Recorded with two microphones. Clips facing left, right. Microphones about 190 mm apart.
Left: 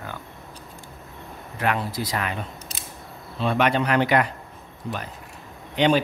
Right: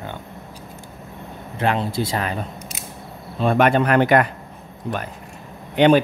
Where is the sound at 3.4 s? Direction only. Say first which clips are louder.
Right 5 dB; 50° right (ahead or behind).